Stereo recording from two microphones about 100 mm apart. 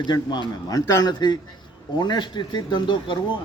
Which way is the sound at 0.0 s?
50° left (ahead or behind).